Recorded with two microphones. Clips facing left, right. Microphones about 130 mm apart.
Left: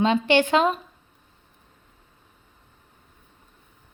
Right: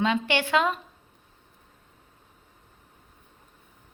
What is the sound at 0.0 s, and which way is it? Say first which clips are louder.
Speech: left 6 dB; 25° left (ahead or behind).